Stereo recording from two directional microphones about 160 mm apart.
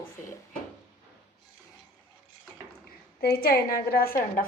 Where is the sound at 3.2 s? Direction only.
70° left (ahead or behind).